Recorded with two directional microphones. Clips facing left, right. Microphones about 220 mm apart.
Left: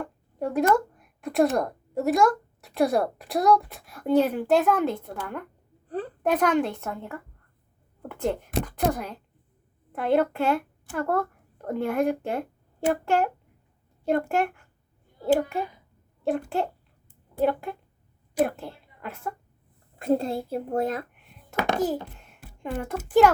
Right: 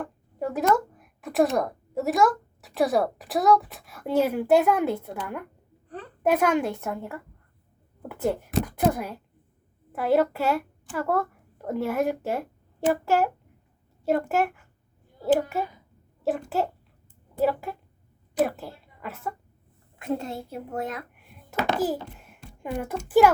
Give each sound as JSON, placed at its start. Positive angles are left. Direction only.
{"t": 0.0, "sound": "a woman's voice", "side_deg": 0}
{"t": 17.4, "sound": "a child's voice", "side_deg": -5}
{"t": 20.0, "sound": "a woman's voice", "side_deg": 35}
{"t": 21.8, "sound": "a child's voice", "side_deg": -5}